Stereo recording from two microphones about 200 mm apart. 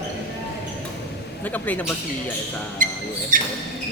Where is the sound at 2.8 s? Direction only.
40° right (ahead or behind).